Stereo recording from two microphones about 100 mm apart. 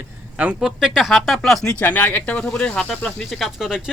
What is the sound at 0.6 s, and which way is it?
Speech, 5° right (ahead or behind).